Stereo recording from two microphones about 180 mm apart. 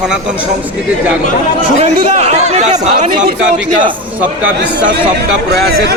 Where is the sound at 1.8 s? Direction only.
35° right (ahead or behind).